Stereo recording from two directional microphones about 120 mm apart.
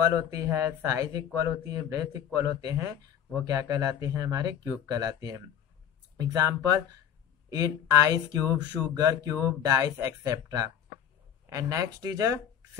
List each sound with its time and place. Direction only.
0.3 s speech: 25° right (ahead or behind)